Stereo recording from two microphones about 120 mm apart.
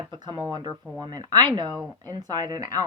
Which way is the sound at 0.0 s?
40° right (ahead or behind).